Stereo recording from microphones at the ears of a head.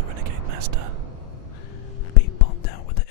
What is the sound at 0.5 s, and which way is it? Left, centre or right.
Speech, right.